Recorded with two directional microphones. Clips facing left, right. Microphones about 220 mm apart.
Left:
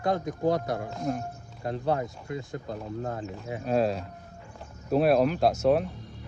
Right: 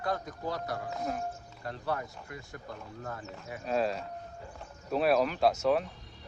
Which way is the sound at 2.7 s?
35° left (ahead or behind).